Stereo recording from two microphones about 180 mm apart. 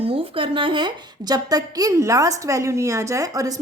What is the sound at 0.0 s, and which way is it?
A woman's voice, 30° right (ahead or behind).